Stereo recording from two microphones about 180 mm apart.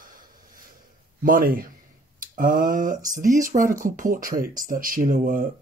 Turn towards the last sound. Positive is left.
turn(degrees=-50)  # may be behind; listen again after turning